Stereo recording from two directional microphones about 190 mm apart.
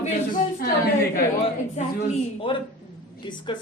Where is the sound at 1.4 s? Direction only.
35° left (ahead or behind).